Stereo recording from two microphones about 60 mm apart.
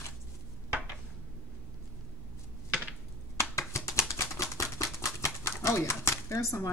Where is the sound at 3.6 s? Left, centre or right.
Left.